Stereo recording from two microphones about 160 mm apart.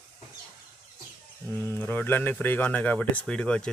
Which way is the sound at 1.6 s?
15° left (ahead or behind).